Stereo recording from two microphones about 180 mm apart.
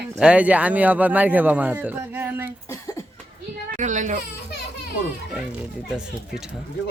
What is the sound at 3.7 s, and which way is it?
Speech, 45° right (ahead or behind).